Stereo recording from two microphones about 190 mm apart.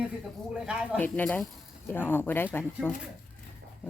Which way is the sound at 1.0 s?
10° left (ahead or behind).